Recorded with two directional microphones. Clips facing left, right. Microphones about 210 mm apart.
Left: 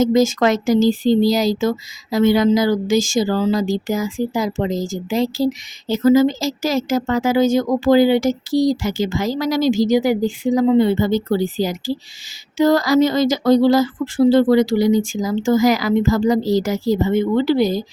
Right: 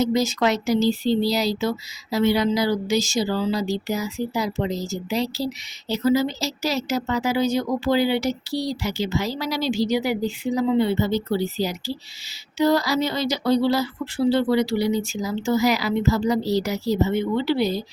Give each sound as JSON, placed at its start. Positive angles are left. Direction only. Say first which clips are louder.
{"t": 0.0, "sound": "speech", "louder": "left 6 dB", "side_deg": 45}